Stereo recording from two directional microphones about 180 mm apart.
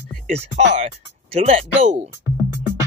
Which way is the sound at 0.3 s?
35° right (ahead or behind).